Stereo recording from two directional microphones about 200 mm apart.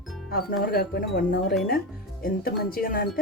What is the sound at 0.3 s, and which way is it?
Speech, 50° left (ahead or behind).